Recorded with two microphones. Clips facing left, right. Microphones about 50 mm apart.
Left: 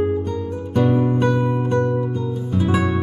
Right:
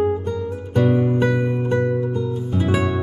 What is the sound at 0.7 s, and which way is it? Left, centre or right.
Music, centre.